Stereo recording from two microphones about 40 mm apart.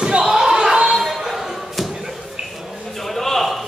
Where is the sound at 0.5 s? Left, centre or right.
Right.